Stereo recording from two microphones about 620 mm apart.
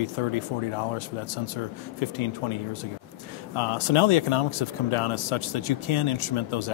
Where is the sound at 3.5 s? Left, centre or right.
Left.